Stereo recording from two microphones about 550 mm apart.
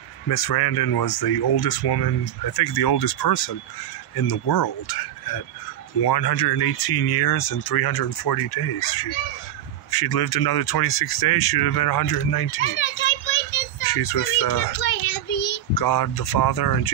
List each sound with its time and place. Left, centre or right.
0.3 s speech: left
5.9 s speech: left
12.5 s children playing: left
13.8 s speech: left
15.7 s speech: left